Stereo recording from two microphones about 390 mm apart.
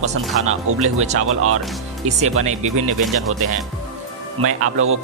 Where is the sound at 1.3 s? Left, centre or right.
Right.